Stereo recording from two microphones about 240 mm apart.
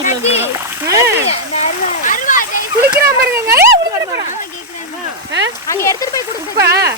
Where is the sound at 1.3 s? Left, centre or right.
Left.